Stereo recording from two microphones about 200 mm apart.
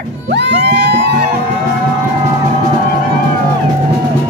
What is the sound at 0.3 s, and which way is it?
Music, 60° right (ahead or behind).